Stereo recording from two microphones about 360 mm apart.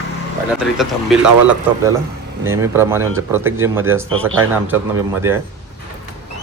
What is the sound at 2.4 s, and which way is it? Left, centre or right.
Speech, centre.